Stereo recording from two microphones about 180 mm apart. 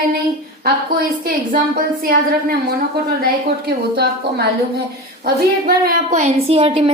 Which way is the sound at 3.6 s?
65° right (ahead or behind).